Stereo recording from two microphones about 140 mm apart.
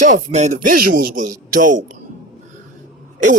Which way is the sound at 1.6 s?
65° right (ahead or behind).